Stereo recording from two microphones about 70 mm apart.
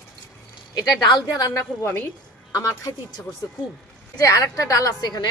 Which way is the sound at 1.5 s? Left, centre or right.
Left.